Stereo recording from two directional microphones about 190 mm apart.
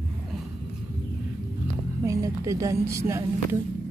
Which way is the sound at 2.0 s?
15° right (ahead or behind).